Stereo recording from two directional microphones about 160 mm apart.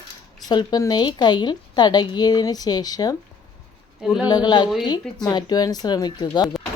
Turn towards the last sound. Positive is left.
turn(degrees=25)  # may be behind; listen again after turning